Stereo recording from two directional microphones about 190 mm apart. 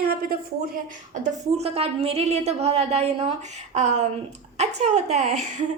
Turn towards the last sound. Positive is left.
turn(degrees=-35)  # may be behind; listen again after turning